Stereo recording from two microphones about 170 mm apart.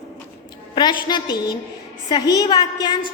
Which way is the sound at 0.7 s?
25° left (ahead or behind).